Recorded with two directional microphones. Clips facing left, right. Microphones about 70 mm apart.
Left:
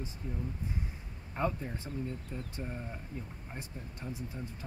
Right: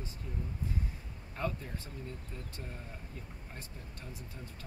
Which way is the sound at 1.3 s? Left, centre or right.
Left.